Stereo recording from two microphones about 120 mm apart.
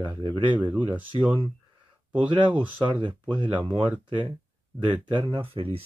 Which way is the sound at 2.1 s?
45° right (ahead or behind).